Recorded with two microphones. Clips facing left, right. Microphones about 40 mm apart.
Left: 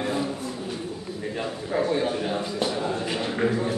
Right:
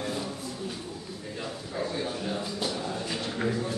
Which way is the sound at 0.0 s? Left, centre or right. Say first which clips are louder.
Left 6 dB; left.